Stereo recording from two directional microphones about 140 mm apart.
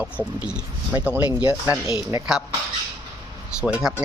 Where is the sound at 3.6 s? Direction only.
5° right (ahead or behind).